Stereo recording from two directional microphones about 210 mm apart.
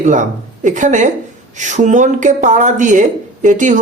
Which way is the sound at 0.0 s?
35° right (ahead or behind).